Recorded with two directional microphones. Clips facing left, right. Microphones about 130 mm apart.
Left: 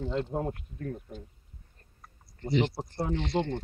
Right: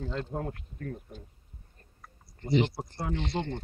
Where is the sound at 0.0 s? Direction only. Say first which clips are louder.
Left 3 dB; 20° left (ahead or behind).